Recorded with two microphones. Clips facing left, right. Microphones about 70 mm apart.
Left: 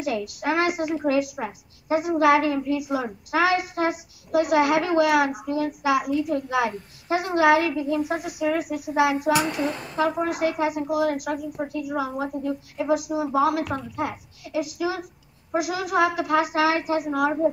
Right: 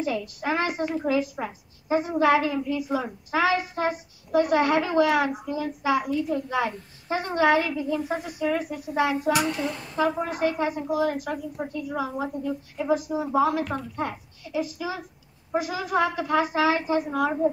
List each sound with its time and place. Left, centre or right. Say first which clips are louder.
0.0 s a woman's voice: left 2 dB; centre